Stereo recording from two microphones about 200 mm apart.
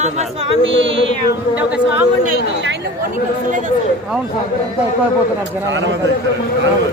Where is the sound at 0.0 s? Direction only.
30° right (ahead or behind).